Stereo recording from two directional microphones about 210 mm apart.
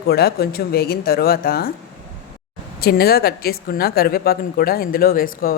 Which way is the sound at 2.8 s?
45° left (ahead or behind).